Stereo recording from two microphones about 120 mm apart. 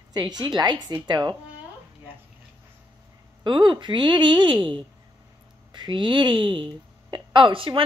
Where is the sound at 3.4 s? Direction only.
40° right (ahead or behind).